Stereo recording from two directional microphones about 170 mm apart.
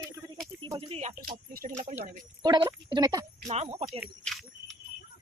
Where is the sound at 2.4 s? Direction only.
25° right (ahead or behind).